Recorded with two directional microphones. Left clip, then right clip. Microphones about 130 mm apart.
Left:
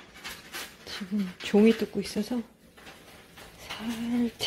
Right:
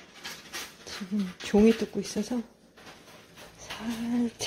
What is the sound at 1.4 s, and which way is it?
Speech, 5° left (ahead or behind).